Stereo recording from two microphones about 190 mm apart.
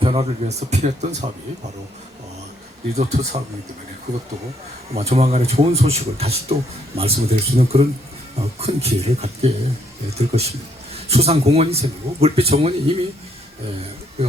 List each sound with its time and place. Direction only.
0.0 s a man's voice: 30° right (ahead or behind)
2.9 s a man's voice: 35° right (ahead or behind)
4.1 s speech: 20° right (ahead or behind)
4.9 s a man's voice: 35° right (ahead or behind)